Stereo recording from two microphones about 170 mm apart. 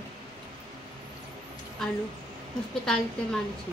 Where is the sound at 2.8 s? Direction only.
5° left (ahead or behind).